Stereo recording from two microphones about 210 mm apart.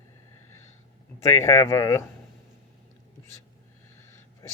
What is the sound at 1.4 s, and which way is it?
Speech, 15° left (ahead or behind).